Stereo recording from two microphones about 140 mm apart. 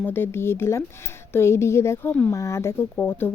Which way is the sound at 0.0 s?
15° left (ahead or behind).